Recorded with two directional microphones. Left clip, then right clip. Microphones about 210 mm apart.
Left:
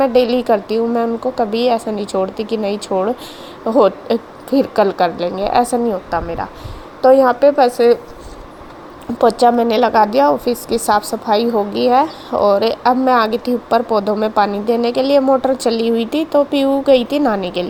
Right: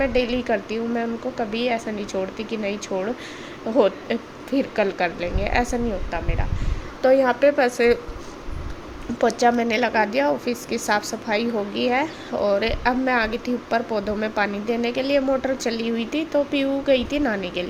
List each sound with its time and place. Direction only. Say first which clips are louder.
0.0 s a woman's voice: left 9 dB; 25° left (ahead or behind)
7.1 s a woman's voice: left 7 dB; 15° left (ahead or behind)
9.2 s a woman's voice: left 7 dB; centre (ahead or behind)
9.6 s a woman's voice: left 8 dB; 25° left (ahead or behind)